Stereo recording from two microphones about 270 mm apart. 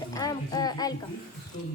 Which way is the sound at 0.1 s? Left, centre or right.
Centre.